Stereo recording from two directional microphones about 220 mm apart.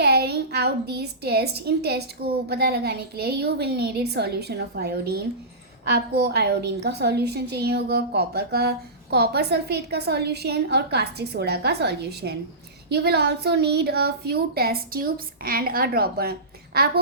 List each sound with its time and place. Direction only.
0.0 s a woman's voice: 45° right (ahead or behind)